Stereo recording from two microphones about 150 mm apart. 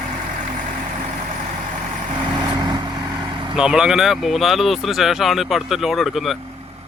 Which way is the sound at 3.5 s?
5° right (ahead or behind).